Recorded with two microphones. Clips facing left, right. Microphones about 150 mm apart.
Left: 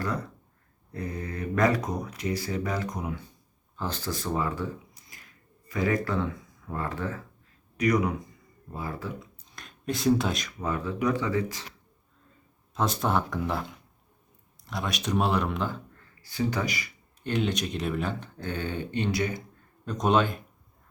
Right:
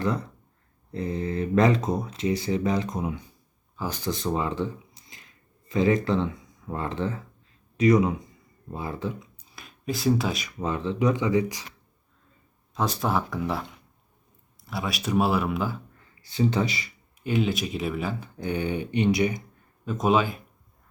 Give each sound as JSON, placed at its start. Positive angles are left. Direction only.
{"t": 0.9, "sound": "speech", "side_deg": -25}
{"t": 3.8, "sound": "speech", "side_deg": -10}
{"t": 9.5, "sound": "speech", "side_deg": -5}
{"t": 10.6, "sound": "speech", "side_deg": -25}
{"t": 12.7, "sound": "speech", "side_deg": 0}
{"t": 16.2, "sound": "speech", "side_deg": -25}
{"t": 17.2, "sound": "speech", "side_deg": -5}
{"t": 19.8, "sound": "speech", "side_deg": -5}